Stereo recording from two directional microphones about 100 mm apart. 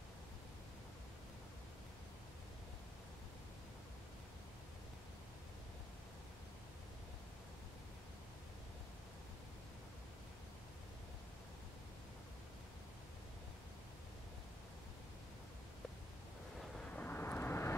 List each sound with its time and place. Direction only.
16.7 s vehicle: 15° left (ahead or behind)